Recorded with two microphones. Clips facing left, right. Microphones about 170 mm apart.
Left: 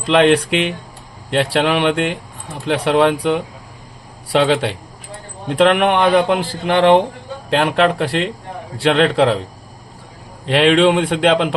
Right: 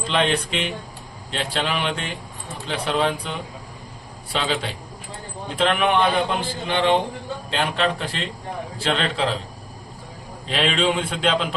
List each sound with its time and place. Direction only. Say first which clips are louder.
0.0 s a man's voice: left 9 dB; 70° left (ahead or behind)
10.4 s a man's voice: left 9 dB; 70° left (ahead or behind)